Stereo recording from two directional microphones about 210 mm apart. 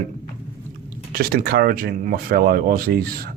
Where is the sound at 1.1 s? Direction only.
45° right (ahead or behind).